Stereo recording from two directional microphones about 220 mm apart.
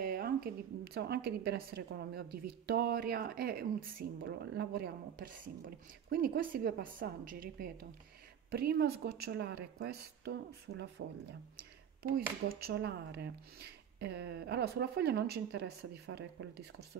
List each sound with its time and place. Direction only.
0.0 s a woman's voice: 40° right (ahead or behind)